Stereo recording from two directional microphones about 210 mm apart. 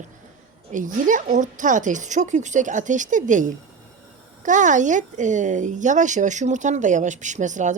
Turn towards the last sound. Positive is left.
turn(degrees=-35)  # may be behind; listen again after turning